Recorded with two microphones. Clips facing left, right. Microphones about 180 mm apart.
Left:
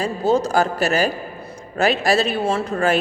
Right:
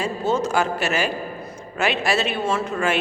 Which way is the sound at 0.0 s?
35° left (ahead or behind).